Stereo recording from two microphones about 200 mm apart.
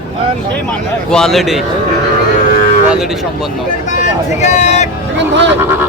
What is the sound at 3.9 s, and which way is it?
Speech, 35° left (ahead or behind).